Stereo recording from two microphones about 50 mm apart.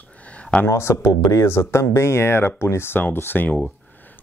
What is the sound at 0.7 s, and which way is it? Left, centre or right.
Speech, left.